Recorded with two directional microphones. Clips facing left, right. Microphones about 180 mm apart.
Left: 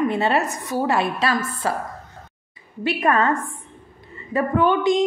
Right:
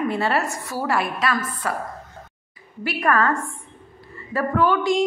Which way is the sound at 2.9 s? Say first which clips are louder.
Left 1 dB; 20° left (ahead or behind).